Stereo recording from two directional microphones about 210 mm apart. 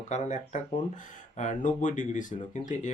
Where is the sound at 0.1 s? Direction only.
35° left (ahead or behind).